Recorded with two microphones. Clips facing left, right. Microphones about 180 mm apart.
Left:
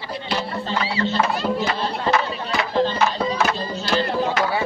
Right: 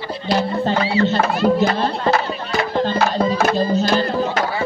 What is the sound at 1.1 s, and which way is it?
Music, 50° right (ahead or behind).